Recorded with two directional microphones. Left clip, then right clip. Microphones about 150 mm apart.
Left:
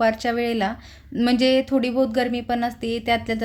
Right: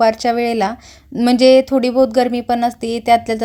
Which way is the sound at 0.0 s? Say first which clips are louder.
Right 7 dB; 45° right (ahead or behind).